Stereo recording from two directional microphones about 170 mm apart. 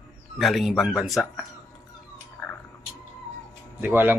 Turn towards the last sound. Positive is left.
turn(degrees=-10)  # may be behind; listen again after turning